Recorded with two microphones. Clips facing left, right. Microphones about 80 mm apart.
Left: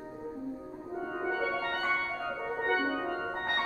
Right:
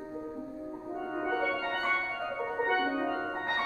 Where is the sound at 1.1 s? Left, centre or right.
Centre.